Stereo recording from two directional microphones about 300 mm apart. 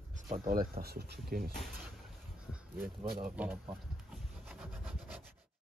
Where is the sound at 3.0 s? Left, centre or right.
Right.